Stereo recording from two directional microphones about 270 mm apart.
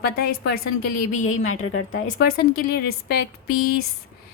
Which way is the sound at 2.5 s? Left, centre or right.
Left.